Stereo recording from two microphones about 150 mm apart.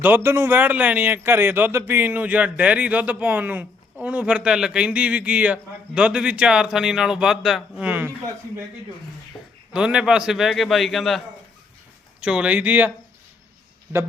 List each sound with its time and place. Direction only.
0.0 s a man's voice: 15° right (ahead or behind)
9.3 s a sound: 25° left (ahead or behind)
9.7 s a man's voice: 5° right (ahead or behind)
12.2 s a man's voice: 10° right (ahead or behind)